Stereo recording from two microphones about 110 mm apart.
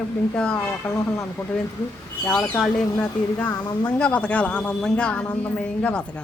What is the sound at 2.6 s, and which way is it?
A woman's voice, 10° left (ahead or behind).